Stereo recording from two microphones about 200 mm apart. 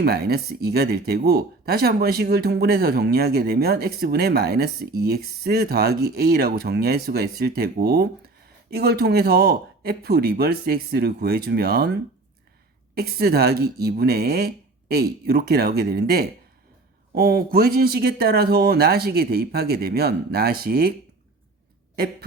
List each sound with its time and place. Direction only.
0.0 s speech: 50° right (ahead or behind)
12.9 s speech: 50° right (ahead or behind)